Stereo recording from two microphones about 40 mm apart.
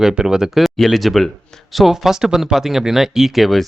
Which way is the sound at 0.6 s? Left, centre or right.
Centre.